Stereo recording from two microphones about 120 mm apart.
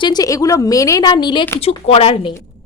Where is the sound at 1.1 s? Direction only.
40° left (ahead or behind).